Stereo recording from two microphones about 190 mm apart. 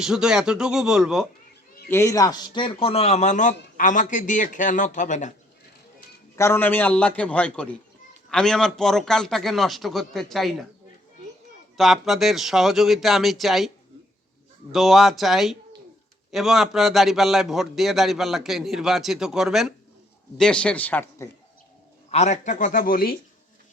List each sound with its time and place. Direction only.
0.0 s a man's voice: 5° right (ahead or behind)
1.9 s a man's voice: 15° left (ahead or behind); by 5.3 s 40° left (ahead or behind)
6.3 s a man's voice: 15° left (ahead or behind)
11.8 s a man's voice: centre (ahead or behind)
14.7 s a man's voice: centre (ahead or behind)
22.1 s speech: 35° left (ahead or behind)